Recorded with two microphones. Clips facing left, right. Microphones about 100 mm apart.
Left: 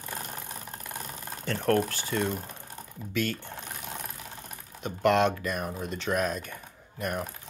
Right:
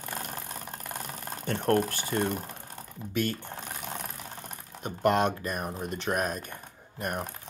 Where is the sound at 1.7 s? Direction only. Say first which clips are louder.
Even; 45° right (ahead or behind).